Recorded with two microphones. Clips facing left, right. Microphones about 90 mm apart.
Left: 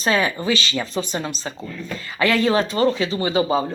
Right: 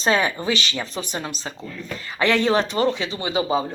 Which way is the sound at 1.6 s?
10° left (ahead or behind).